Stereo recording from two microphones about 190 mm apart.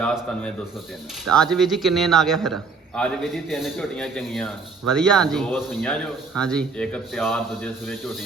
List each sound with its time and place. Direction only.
0.0 s a man's voice: 5° left (ahead or behind)